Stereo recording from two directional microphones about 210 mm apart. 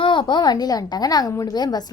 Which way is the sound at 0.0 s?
20° left (ahead or behind).